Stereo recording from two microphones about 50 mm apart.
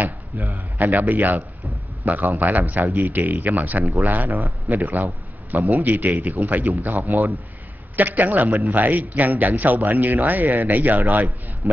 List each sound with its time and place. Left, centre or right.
0.5 s a man's voice: right
3.8 s speech: right
4.1 s a man's voice: right